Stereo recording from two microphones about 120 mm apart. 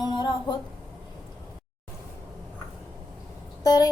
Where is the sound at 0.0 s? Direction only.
35° left (ahead or behind).